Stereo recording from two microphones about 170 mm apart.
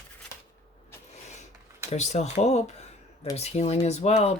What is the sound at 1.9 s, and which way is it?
Speech, 40° left (ahead or behind).